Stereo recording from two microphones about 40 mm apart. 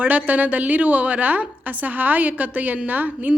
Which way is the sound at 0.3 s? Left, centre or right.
Right.